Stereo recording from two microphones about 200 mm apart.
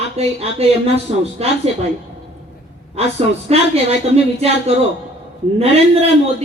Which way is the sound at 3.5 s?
30° right (ahead or behind).